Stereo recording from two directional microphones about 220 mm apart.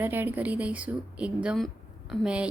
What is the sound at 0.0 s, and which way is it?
A woman's voice, 10° right (ahead or behind).